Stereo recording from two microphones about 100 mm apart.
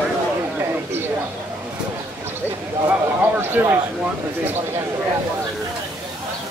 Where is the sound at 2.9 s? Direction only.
20° right (ahead or behind).